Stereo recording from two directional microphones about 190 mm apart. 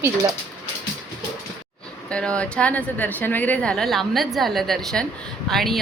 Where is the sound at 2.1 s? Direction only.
5° left (ahead or behind).